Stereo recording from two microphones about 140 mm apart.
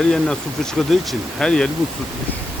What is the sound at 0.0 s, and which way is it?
Speech, 5° left (ahead or behind).